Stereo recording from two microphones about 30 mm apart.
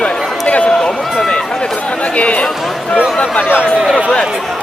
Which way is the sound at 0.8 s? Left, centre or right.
Centre.